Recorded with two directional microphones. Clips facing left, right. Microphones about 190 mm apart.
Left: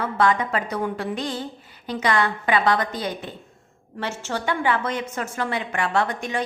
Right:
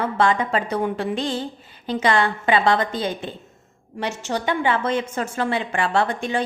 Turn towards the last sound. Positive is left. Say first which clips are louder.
# right 2 dB
turn(degrees=-30)  # may be behind; listen again after turning